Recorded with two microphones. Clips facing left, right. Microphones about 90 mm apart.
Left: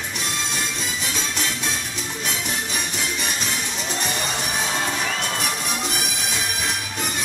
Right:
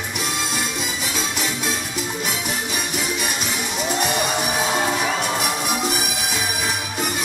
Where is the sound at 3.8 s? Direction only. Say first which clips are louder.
Right 7 dB; 10° right (ahead or behind).